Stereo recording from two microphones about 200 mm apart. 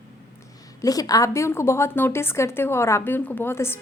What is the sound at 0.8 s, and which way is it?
A woman's voice, 20° left (ahead or behind).